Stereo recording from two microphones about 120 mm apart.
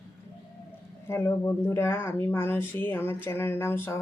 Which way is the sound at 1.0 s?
20° left (ahead or behind).